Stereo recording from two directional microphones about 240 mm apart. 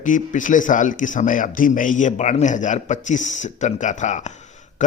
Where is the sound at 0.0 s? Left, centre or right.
Left.